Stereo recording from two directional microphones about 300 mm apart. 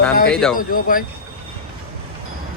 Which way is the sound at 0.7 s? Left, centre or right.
Left.